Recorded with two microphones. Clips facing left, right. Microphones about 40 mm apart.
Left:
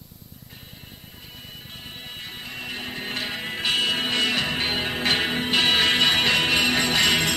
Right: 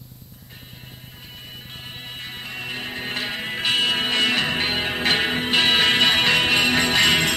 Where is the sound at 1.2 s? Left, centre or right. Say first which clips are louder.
Right 2 dB; right.